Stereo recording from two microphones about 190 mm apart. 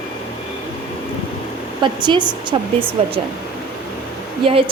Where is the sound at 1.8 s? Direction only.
25° right (ahead or behind).